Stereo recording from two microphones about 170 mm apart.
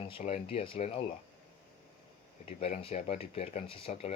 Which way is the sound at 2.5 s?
35° left (ahead or behind).